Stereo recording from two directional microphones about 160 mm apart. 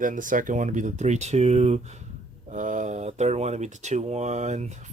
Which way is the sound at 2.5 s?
50° right (ahead or behind).